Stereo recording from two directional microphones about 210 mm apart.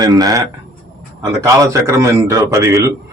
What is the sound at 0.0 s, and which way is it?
A man's voice, 20° right (ahead or behind).